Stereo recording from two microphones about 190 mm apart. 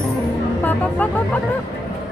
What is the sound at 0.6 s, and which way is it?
Speech, 10° left (ahead or behind).